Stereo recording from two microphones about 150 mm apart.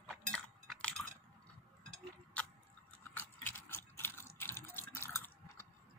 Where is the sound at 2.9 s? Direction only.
10° left (ahead or behind).